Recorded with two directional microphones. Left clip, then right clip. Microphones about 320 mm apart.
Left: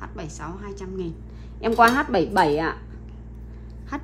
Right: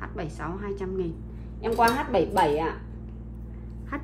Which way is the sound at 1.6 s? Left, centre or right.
Left.